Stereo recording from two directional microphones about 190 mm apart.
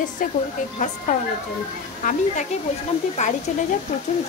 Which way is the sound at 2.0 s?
40° left (ahead or behind).